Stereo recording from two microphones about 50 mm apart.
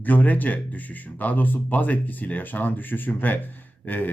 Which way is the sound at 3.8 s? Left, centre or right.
Left.